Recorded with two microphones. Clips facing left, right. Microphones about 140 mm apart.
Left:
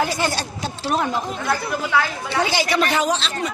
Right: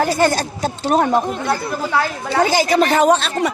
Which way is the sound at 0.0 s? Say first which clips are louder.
Right 6 dB; 45° right (ahead or behind).